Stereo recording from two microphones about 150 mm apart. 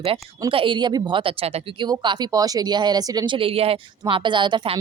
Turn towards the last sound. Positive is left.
turn(degrees=-35)  # may be behind; listen again after turning